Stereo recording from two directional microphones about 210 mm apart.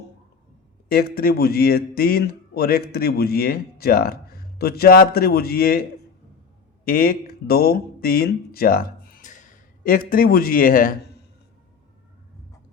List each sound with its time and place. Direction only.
0.9 s speech: 45° left (ahead or behind)
6.8 s speech: 45° left (ahead or behind)